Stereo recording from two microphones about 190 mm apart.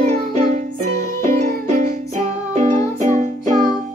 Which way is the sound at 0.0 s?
40° right (ahead or behind).